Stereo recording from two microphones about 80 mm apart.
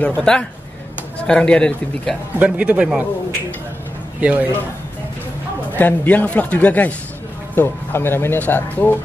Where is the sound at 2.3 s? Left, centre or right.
Centre.